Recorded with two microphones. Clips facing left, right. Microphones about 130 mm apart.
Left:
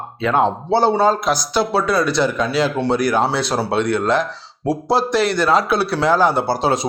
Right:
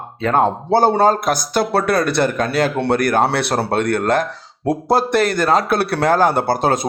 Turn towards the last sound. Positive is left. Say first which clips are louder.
# right 1 dB
turn(degrees=-50)  # may be behind; listen again after turning